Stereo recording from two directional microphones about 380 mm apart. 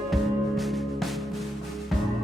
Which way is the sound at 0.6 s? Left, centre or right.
Centre.